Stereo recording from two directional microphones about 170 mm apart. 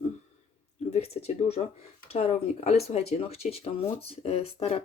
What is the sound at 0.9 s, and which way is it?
Speech, 40° left (ahead or behind).